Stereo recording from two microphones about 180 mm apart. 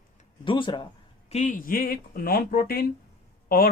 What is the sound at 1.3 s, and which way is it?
Speech, 45° left (ahead or behind).